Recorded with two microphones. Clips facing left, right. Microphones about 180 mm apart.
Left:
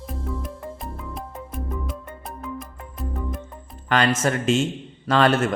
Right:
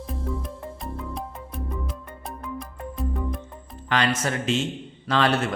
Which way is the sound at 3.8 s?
50° left (ahead or behind).